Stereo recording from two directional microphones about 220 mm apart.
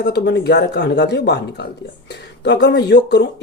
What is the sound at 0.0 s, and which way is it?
Speech, 50° left (ahead or behind).